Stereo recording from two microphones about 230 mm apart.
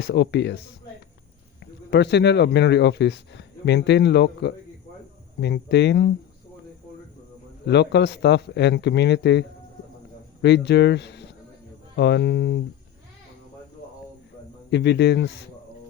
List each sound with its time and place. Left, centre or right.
0.0 s speech: left
1.9 s speech: left
7.6 s speech: left
10.4 s speech: left
14.7 s speech: left